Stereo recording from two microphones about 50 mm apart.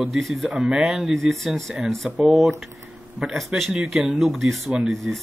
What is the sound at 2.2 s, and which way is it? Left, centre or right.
Speech, centre.